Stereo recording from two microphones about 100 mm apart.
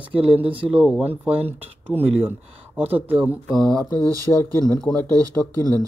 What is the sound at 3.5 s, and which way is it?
Speech, 5° left (ahead or behind).